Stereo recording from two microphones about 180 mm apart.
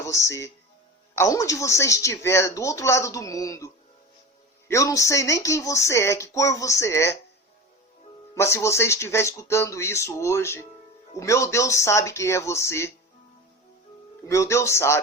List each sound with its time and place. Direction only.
0.0 s speech: 15° left (ahead or behind)
4.7 s speech: 20° left (ahead or behind)
8.4 s speech: 15° left (ahead or behind)
14.3 s speech: 15° left (ahead or behind)